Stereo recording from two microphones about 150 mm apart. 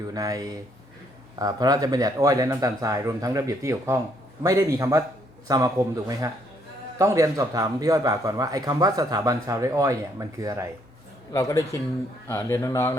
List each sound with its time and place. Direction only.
0.1 s a man's voice: 25° right (ahead or behind)
11.3 s speech: 20° left (ahead or behind)